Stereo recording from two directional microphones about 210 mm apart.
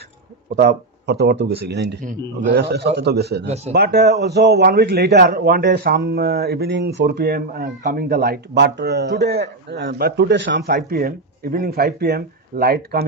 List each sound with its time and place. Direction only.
0.6 s speech: 50° right (ahead or behind)
3.4 s speech: 30° right (ahead or behind)
3.7 s speech: 50° right (ahead or behind)
10.7 s speech: 45° right (ahead or behind)